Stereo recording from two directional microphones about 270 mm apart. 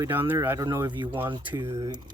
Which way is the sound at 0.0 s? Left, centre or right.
Centre.